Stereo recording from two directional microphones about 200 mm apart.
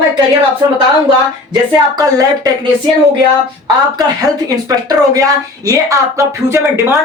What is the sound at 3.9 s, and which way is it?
A woman's voice, 20° right (ahead or behind).